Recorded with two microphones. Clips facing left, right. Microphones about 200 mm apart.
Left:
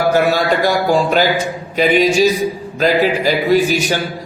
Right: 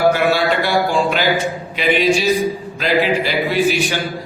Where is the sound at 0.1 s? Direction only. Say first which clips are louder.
Left 2 dB; 40° left (ahead or behind).